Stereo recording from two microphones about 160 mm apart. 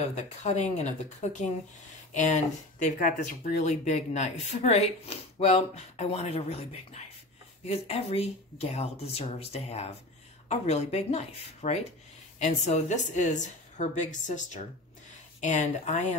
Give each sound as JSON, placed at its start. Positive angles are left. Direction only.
{"t": 0.0, "sound": "speech", "side_deg": 45}